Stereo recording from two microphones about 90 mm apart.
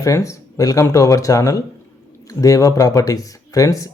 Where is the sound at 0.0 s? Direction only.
35° left (ahead or behind).